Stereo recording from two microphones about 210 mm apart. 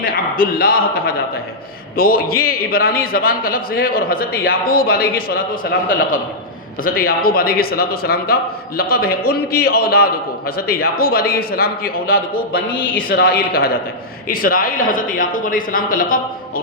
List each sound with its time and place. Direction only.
0.0 s a man's voice: 45° left (ahead or behind)
2.2 s a man's voice: 45° left (ahead or behind)